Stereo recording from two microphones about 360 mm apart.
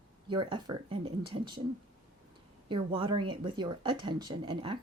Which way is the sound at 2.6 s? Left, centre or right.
Centre.